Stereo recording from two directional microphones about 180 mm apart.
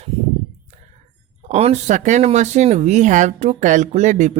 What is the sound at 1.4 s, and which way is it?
Speech, 35° right (ahead or behind).